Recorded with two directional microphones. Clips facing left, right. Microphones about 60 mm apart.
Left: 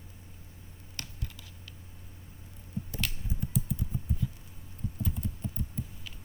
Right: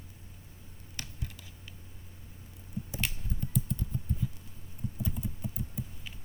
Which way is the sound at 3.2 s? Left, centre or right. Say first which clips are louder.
Even; centre.